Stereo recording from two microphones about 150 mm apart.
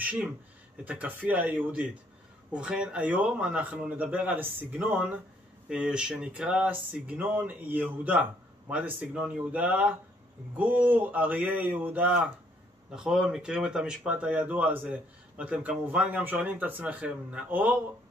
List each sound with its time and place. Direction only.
0.0 s speech: 10° right (ahead or behind)